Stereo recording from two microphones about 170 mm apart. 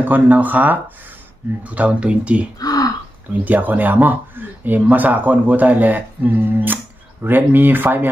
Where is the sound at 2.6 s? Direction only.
20° left (ahead or behind).